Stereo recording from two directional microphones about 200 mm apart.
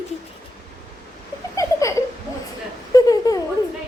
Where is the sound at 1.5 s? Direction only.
15° left (ahead or behind).